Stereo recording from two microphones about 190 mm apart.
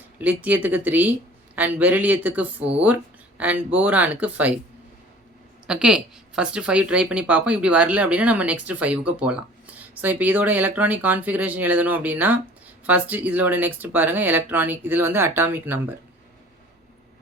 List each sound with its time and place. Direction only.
0.2 s a woman's voice: 10° right (ahead or behind)
5.6 s a woman's voice: 5° right (ahead or behind)